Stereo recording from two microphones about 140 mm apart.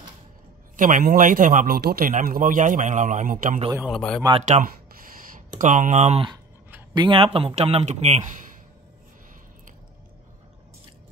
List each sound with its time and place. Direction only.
0.7 s a man's voice: 70° right (ahead or behind)
3.8 s speech: centre (ahead or behind)
4.3 s speech: 50° right (ahead or behind)
6.9 s speech: 35° right (ahead or behind); by 8.2 s 50° right (ahead or behind)